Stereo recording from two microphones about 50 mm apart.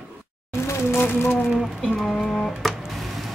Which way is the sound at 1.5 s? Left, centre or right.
Centre.